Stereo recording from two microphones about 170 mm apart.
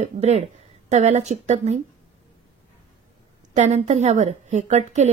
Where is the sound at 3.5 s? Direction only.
40° right (ahead or behind).